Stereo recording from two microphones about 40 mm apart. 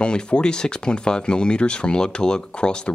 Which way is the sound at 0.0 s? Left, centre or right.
Left.